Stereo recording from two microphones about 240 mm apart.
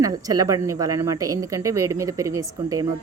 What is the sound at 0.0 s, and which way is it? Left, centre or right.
Speech, centre.